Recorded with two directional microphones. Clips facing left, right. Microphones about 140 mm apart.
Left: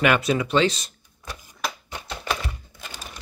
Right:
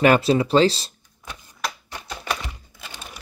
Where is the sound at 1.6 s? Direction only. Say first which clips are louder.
Right 1 dB; centre (ahead or behind).